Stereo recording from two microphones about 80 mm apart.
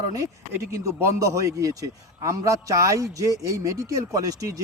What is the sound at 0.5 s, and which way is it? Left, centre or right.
A man's voice, right.